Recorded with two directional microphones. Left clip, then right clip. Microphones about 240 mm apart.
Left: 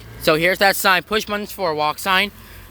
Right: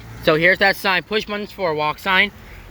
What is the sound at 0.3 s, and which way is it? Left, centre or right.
Speech, centre.